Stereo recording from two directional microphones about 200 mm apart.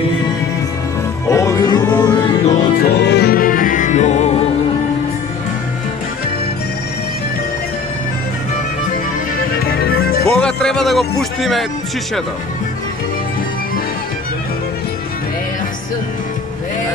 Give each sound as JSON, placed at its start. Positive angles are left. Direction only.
{"t": 1.2, "sound": "music", "side_deg": 15}
{"t": 2.8, "sound": "music", "side_deg": 55}
{"t": 9.6, "sound": "music", "side_deg": 50}
{"t": 10.2, "sound": "music", "side_deg": 5}